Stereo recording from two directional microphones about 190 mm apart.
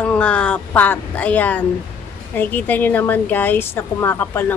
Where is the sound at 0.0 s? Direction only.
5° left (ahead or behind).